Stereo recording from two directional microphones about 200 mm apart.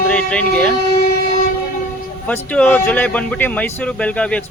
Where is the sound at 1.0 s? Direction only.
50° left (ahead or behind).